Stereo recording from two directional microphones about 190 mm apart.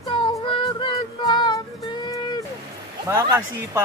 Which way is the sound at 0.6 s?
25° left (ahead or behind).